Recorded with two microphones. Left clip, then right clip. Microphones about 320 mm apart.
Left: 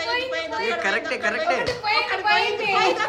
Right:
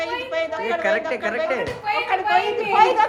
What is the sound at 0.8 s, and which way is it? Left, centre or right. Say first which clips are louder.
Speech: right 2 dB; centre.